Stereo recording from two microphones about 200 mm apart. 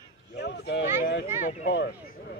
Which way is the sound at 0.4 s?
55° left (ahead or behind).